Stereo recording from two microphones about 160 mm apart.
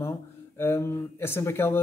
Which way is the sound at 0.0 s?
15° left (ahead or behind).